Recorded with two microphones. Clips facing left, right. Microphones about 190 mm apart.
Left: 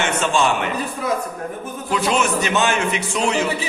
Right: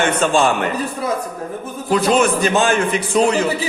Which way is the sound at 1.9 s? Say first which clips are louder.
Right 5 dB; 40° right (ahead or behind).